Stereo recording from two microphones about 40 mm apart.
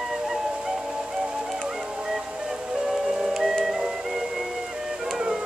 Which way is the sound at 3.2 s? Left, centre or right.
Centre.